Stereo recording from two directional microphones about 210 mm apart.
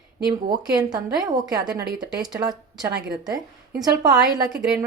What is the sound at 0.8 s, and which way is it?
A woman's voice, 20° right (ahead or behind).